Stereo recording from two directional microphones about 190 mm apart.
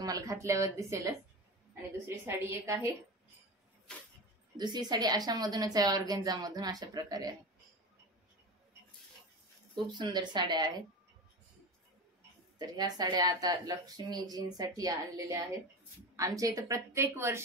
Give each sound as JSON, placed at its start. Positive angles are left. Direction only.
{"t": 0.0, "sound": "a woman's voice", "side_deg": -20}
{"t": 4.6, "sound": "speech", "side_deg": -20}
{"t": 9.8, "sound": "speech", "side_deg": -25}
{"t": 12.5, "sound": "a woman's voice", "side_deg": -20}